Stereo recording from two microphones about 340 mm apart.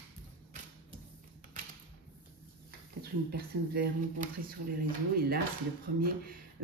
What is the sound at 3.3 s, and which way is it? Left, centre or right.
Mantra, right.